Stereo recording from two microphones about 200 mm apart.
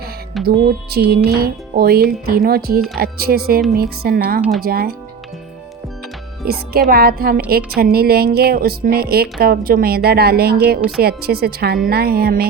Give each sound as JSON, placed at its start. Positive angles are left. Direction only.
{"t": 0.4, "sound": "speech", "side_deg": -50}
{"t": 6.4, "sound": "speech", "side_deg": -50}